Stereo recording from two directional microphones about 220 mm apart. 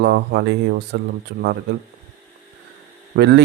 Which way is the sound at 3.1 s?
50° right (ahead or behind).